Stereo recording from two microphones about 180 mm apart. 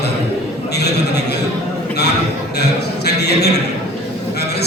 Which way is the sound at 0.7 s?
65° left (ahead or behind).